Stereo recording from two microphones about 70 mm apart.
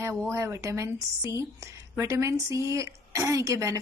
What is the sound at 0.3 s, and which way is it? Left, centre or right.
A woman's voice, right.